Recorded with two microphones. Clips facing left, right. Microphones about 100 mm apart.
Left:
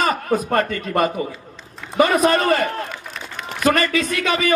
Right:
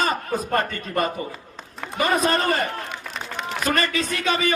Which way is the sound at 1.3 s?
50° right (ahead or behind).